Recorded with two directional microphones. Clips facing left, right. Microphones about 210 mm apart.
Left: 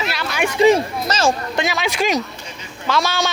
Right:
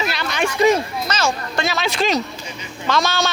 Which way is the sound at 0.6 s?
30° left (ahead or behind).